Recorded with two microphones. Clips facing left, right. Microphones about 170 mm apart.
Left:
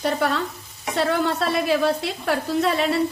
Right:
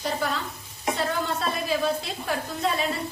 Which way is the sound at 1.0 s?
75° left (ahead or behind).